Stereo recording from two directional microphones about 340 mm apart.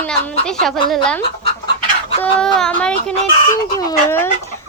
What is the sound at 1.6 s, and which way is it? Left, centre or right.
Chicken, centre.